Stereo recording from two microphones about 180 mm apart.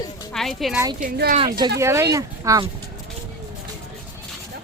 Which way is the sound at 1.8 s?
15° right (ahead or behind).